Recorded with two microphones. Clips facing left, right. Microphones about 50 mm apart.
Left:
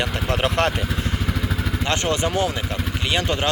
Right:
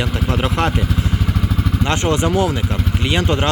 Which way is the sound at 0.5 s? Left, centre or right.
Centre.